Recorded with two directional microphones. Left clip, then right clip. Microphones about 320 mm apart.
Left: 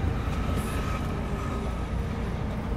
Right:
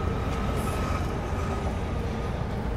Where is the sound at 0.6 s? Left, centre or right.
Right.